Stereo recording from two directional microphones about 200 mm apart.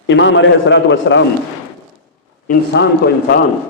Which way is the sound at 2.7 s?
65° left (ahead or behind).